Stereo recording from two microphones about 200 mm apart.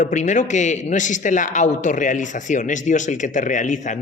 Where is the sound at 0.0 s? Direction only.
35° left (ahead or behind).